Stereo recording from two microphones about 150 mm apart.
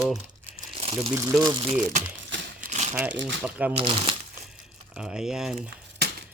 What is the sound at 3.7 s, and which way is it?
Speech, 40° right (ahead or behind).